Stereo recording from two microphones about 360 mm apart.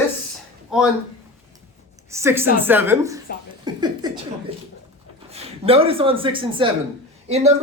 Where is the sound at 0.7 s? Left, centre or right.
Centre.